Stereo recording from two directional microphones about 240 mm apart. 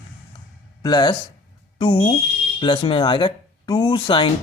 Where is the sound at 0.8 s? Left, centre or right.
Centre.